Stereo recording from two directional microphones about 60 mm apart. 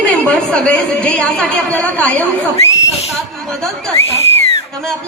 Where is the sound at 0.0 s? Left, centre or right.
Left.